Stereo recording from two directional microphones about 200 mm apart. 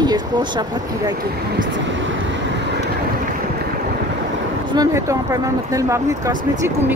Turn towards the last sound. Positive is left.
turn(degrees=-15)  # may be behind; listen again after turning